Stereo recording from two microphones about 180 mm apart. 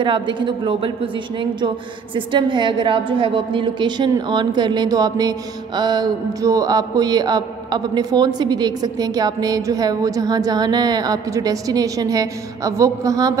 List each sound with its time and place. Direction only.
0.0 s a man's voice: 25° right (ahead or behind)
2.1 s a man's voice: 25° right (ahead or behind)